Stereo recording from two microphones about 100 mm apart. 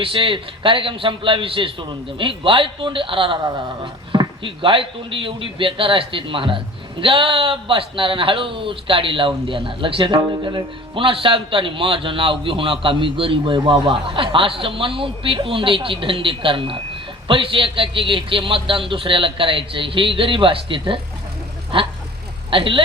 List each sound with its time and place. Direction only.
0.0 s a man's voice: 60° right (ahead or behind)
10.2 s a man's voice: 50° right (ahead or behind)